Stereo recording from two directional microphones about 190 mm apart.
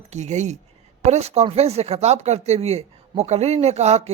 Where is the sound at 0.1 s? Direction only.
40° right (ahead or behind).